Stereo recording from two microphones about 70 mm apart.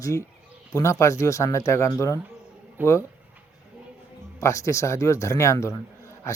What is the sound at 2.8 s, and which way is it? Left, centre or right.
Speech, right.